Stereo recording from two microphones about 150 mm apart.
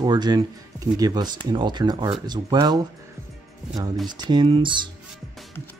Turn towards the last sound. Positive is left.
turn(degrees=-35)  # may be behind; listen again after turning